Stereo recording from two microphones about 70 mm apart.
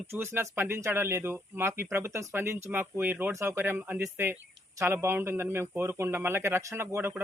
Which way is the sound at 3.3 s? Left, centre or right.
Right.